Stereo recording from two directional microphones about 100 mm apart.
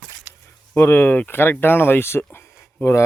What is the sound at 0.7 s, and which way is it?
Speech, 25° left (ahead or behind).